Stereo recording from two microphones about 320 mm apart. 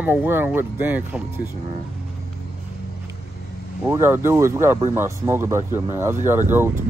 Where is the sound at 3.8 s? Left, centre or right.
Centre.